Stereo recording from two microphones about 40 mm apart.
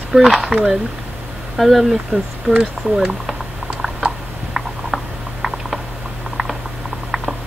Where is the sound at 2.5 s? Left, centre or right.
Right.